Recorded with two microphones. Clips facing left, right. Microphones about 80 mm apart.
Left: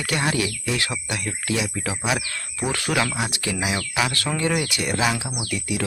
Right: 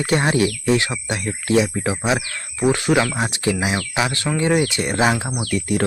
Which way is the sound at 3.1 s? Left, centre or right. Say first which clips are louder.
Right 5 dB; right.